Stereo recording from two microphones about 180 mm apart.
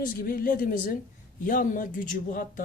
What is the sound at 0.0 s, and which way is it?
Speech, 50° left (ahead or behind).